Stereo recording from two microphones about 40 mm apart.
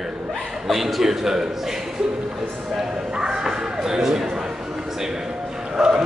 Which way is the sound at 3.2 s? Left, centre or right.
Centre.